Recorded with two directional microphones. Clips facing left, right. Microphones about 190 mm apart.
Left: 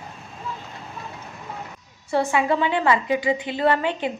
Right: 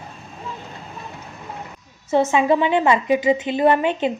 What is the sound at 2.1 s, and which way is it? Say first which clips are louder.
A woman's voice: right 4 dB; 20° right (ahead or behind).